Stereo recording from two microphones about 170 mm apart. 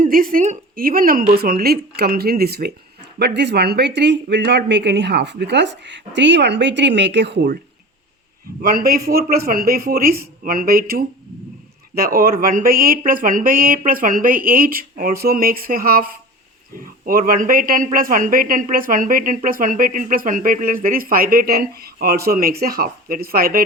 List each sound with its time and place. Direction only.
0.0 s speech: 55° right (ahead or behind); by 7.6 s 70° right (ahead or behind)
8.6 s speech: 60° right (ahead or behind)